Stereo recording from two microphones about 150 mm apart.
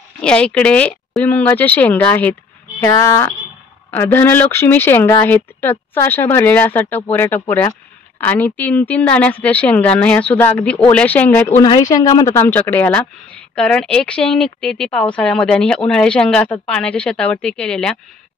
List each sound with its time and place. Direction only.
0.2 s speech: 5° left (ahead or behind)
2.8 s speech: 20° left (ahead or behind)
11.6 s speech: 25° left (ahead or behind); by 17.9 s 5° left (ahead or behind)